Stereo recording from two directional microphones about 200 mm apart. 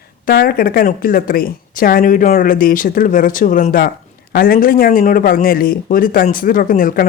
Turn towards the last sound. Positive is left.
turn(degrees=45)  # may be behind; listen again after turning